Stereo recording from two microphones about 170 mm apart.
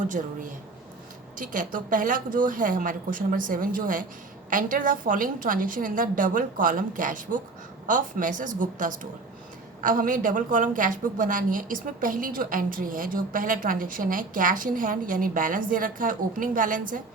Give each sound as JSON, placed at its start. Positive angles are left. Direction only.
{"t": 0.1, "sound": "a woman's voice", "side_deg": -50}